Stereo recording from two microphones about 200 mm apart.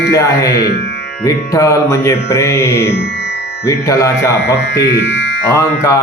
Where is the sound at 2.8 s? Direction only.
55° left (ahead or behind).